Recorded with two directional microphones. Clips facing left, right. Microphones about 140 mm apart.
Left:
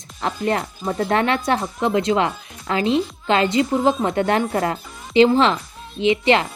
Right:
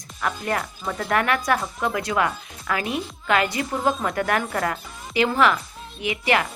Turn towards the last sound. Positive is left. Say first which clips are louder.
# left 6 dB
turn(degrees=25)  # may be behind; listen again after turning